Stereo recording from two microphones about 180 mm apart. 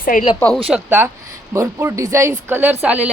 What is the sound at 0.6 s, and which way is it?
Speech, 10° right (ahead or behind).